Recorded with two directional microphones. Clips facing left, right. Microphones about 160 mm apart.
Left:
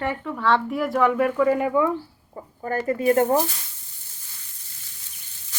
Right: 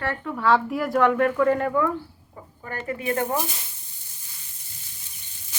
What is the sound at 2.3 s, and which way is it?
Chicken, 40° left (ahead or behind).